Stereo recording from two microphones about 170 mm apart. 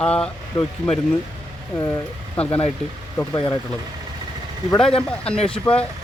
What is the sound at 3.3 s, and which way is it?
Speech, 30° left (ahead or behind).